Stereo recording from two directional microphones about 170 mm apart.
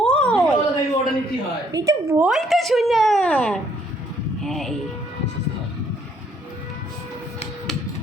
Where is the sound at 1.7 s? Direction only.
20° right (ahead or behind).